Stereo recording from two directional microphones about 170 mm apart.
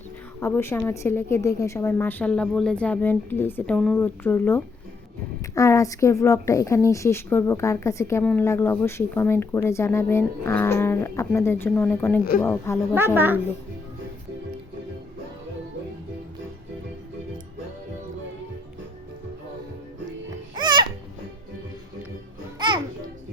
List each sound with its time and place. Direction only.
0.3 s a woman's voice: 15° left (ahead or behind)
13.1 s a child's voice: 10° right (ahead or behind)
20.6 s music: 25° right (ahead or behind)
22.5 s music: 25° right (ahead or behind)